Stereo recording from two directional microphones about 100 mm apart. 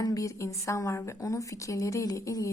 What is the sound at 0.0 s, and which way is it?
A woman's voice, 35° left (ahead or behind).